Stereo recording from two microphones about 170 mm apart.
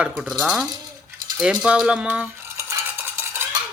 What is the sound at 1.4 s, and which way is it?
Cutlery, 5° right (ahead or behind).